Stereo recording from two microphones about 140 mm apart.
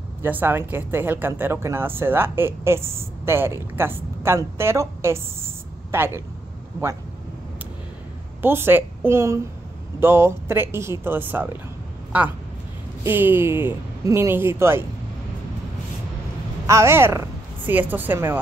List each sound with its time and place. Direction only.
0.2 s speech: 15° right (ahead or behind)
8.4 s a woman's voice: 15° right (ahead or behind)
13.0 s speech: 15° right (ahead or behind)
16.6 s speech: 20° right (ahead or behind)